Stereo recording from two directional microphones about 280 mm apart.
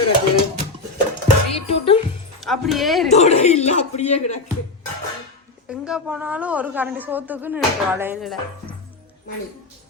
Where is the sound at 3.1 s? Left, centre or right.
Left.